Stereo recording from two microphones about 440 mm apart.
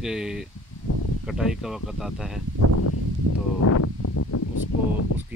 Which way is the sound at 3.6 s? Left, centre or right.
Left.